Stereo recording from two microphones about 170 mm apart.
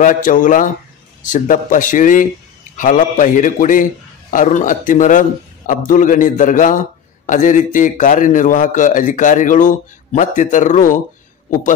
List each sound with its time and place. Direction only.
0.0 s a man's voice: 50° left (ahead or behind)